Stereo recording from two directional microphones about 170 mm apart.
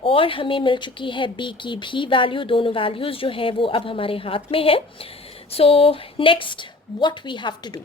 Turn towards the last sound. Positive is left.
turn(degrees=25)  # may be behind; listen again after turning